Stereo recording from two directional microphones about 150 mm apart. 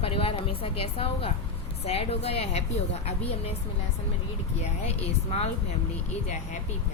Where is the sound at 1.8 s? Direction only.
45° left (ahead or behind).